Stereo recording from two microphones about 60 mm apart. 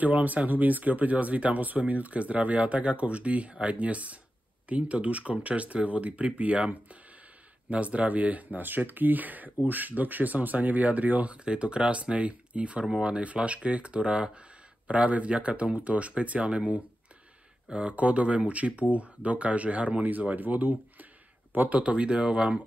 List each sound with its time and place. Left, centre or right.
0.0 s speech: right